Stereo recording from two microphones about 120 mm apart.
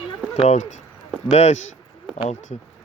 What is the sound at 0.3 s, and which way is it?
Speech, 70° left (ahead or behind).